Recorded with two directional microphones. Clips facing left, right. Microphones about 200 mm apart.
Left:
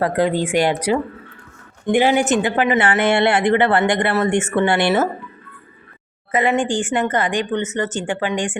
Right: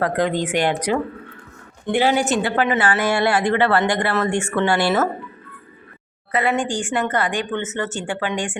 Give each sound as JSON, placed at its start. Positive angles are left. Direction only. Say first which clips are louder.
{"t": 0.0, "sound": "speech", "louder": "left 2 dB", "side_deg": 10}
{"t": 6.3, "sound": "speech", "louder": "left 3 dB", "side_deg": 15}